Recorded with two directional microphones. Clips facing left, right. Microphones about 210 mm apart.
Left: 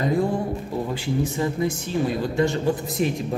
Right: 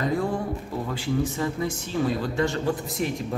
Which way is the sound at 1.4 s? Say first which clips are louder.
Left 3 dB; 20° left (ahead or behind).